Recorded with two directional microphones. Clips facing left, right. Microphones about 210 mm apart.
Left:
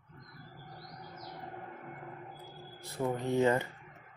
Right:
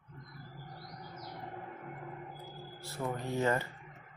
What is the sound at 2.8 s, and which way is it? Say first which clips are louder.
Speech: left 4 dB; 15° left (ahead or behind).